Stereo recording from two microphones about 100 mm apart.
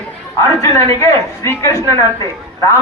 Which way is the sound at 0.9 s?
30° left (ahead or behind).